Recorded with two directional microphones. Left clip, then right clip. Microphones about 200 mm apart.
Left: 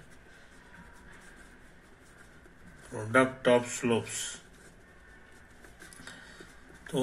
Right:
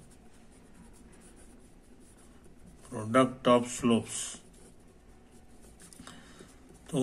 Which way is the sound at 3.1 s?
30° right (ahead or behind).